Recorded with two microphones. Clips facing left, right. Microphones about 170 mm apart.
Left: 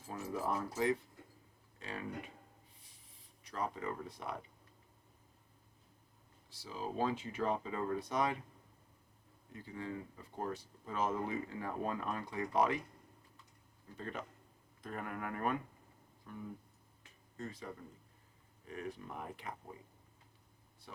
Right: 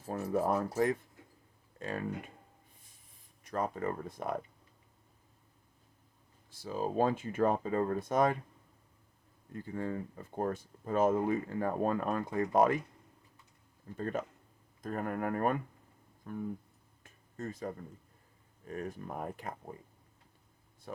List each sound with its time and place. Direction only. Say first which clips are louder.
0.1 s speech: right 7 dB; 55° right (ahead or behind)
3.4 s speech: right 6 dB; 50° right (ahead or behind)
6.5 s speech: right 7 dB; 50° right (ahead or behind)
9.5 s speech: right 6 dB; 50° right (ahead or behind)
13.9 s speech: right 8 dB; 45° right (ahead or behind)
17.0 s a sound: right 4 dB; 45° right (ahead or behind)
18.7 s speech: right 5 dB; 45° right (ahead or behind)
20.9 s speech: right 10 dB; 50° right (ahead or behind)